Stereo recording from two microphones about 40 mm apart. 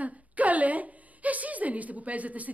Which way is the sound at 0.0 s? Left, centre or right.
Right.